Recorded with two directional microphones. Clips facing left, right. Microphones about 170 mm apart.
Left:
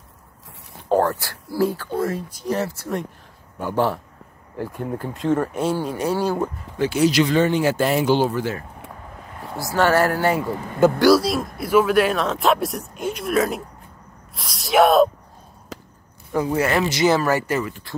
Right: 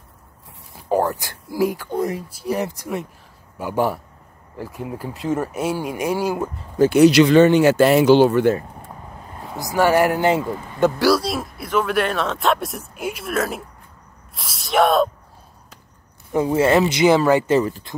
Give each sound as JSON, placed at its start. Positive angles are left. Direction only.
{"t": 0.8, "sound": "speech", "side_deg": -15}
{"t": 6.8, "sound": "speech", "side_deg": -60}
{"t": 9.6, "sound": "speech", "side_deg": -15}
{"t": 10.8, "sound": "speech", "side_deg": 0}
{"t": 15.7, "sound": "chop", "side_deg": 90}
{"t": 16.3, "sound": "speech", "side_deg": -25}
{"t": 17.6, "sound": "speech", "side_deg": -35}